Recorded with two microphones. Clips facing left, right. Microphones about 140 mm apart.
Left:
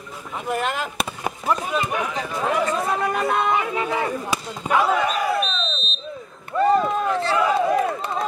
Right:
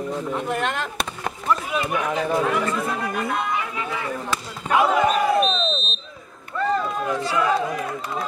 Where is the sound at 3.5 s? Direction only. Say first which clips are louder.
Left 5 dB; 35° left (ahead or behind).